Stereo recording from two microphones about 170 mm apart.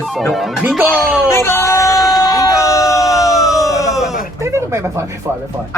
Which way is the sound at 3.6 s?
20° left (ahead or behind).